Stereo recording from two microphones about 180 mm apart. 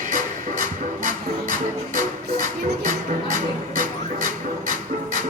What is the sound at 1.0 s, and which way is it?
Music, 50° right (ahead or behind).